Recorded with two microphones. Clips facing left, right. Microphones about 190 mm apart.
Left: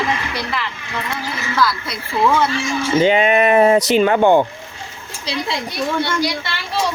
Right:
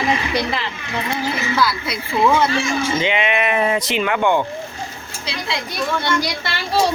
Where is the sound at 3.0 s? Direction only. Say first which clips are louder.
Left 6 dB; 40° left (ahead or behind).